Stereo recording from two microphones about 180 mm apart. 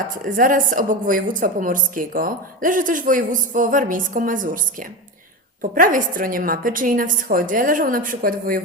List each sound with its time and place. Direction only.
0.1 s a woman's voice: 50° right (ahead or behind)